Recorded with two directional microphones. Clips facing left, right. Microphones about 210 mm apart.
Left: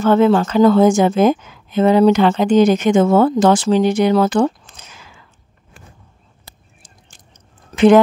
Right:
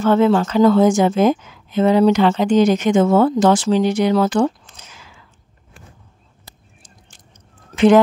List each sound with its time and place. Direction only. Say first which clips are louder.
0.0 s a woman's voice: left 2 dB; 50° left (ahead or behind)
7.7 s fowl: left 2 dB; 55° left (ahead or behind)